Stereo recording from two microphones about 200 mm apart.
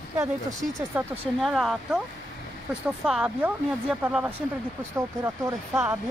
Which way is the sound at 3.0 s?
5° right (ahead or behind).